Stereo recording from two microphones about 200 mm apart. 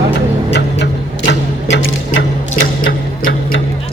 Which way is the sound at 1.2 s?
65° left (ahead or behind).